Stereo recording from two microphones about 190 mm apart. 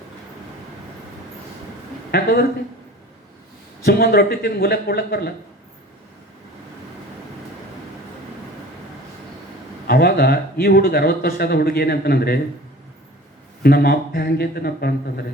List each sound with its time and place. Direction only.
2.1 s speech: 50° left (ahead or behind)
3.8 s speech: 50° left (ahead or behind)
9.8 s speech: 55° left (ahead or behind)
13.6 s speech: 55° left (ahead or behind)